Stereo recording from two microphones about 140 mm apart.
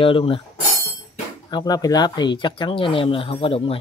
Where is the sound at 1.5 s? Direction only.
25° left (ahead or behind).